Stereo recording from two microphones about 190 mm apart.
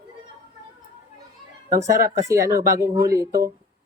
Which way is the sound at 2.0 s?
15° right (ahead or behind).